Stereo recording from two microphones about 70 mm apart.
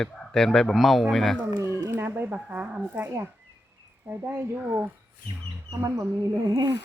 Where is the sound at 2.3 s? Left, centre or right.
Right.